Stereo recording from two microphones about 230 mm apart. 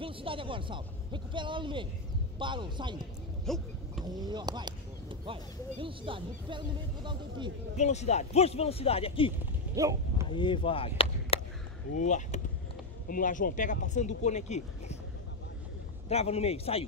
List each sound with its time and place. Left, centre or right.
0.0 s speech: right
3.4 s a sound: centre
4.0 s speech: centre
7.7 s speech: left
9.8 s speech: centre
10.3 s speech: left
16.1 s speech: left